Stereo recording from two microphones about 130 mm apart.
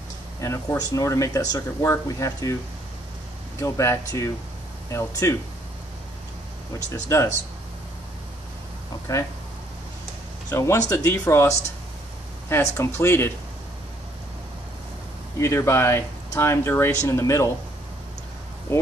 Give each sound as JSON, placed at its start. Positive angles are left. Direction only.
{"t": 0.4, "sound": "speech", "side_deg": 25}
{"t": 3.5, "sound": "speech", "side_deg": 25}
{"t": 6.9, "sound": "speech", "side_deg": 20}
{"t": 10.5, "sound": "speech", "side_deg": 20}
{"t": 15.3, "sound": "speech", "side_deg": 20}
{"t": 18.7, "sound": "speech", "side_deg": 20}